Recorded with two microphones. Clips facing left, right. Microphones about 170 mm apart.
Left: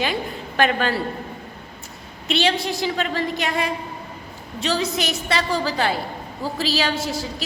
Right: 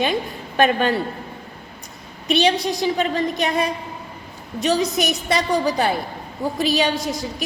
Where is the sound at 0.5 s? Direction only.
20° right (ahead or behind).